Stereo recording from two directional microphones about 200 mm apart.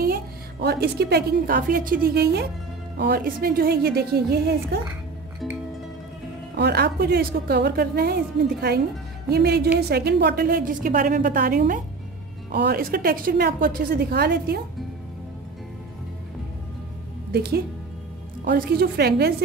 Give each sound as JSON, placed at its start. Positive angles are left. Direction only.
{"t": 0.0, "sound": "a woman's voice", "side_deg": -50}
{"t": 6.6, "sound": "a woman's voice", "side_deg": -55}
{"t": 17.3, "sound": "a woman's voice", "side_deg": -50}